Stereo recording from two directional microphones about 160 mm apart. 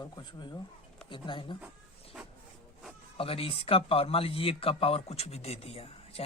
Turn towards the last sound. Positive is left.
turn(degrees=40)  # may be behind; listen again after turning